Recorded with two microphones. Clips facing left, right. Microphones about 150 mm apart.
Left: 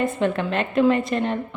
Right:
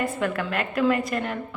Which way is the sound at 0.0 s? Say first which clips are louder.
Left 4 dB; 25° left (ahead or behind).